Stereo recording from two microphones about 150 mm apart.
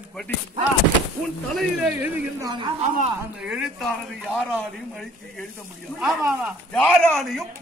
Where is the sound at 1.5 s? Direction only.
10° right (ahead or behind).